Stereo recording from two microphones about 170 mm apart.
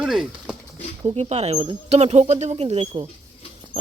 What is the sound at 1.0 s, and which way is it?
Speech, 40° right (ahead or behind).